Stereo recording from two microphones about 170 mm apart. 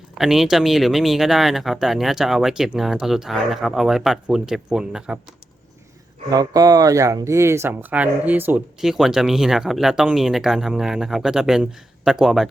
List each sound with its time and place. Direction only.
0.1 s speech: centre (ahead or behind)
6.3 s speech: 20° right (ahead or behind); by 12.5 s centre (ahead or behind)